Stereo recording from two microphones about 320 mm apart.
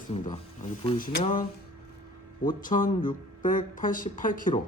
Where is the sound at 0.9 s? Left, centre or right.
Left.